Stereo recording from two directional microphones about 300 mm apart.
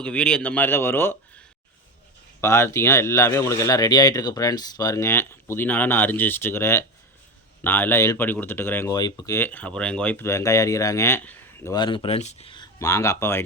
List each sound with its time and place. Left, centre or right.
0.0 s speech: centre
2.4 s speech: centre